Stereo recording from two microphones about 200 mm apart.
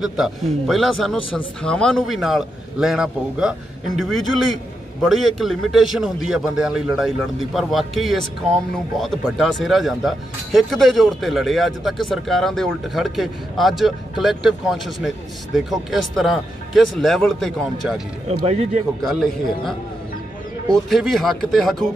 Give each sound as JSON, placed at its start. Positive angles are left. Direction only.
{"t": 0.0, "sound": "speech", "side_deg": 0}
{"t": 18.4, "sound": "speech", "side_deg": -35}
{"t": 19.0, "sound": "speech", "side_deg": 0}